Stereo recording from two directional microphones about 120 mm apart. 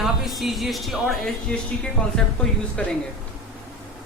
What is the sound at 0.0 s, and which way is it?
Speech, centre (ahead or behind).